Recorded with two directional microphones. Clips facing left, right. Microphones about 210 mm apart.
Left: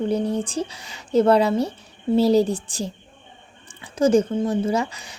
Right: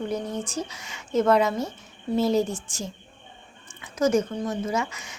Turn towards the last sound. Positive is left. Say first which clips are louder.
# left 5 dB
turn(degrees=35)  # may be behind; listen again after turning